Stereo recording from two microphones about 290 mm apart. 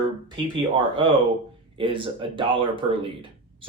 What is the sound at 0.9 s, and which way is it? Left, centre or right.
Speech, centre.